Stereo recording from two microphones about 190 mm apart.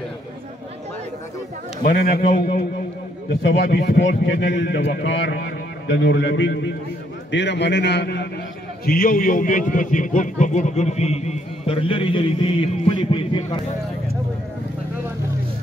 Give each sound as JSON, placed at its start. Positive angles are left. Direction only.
{"t": 1.8, "sound": "a man's voice", "side_deg": 45}
{"t": 3.4, "sound": "a man's voice", "side_deg": 65}
{"t": 8.8, "sound": "a man's voice", "side_deg": 50}
{"t": 12.8, "sound": "music", "side_deg": 25}